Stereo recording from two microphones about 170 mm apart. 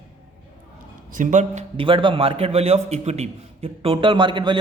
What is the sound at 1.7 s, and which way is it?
A man's voice, 30° right (ahead or behind).